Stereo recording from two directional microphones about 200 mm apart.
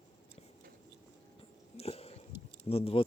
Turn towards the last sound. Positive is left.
turn(degrees=30)  # may be behind; listen again after turning